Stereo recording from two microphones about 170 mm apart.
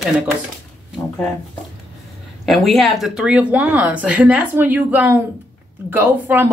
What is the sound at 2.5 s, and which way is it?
Speech, centre (ahead or behind).